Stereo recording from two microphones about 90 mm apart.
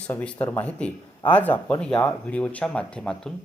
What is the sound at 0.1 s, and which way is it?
A man's voice, 20° left (ahead or behind).